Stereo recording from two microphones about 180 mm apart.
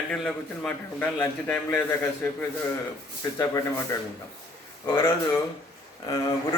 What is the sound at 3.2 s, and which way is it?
Speech, 15° left (ahead or behind).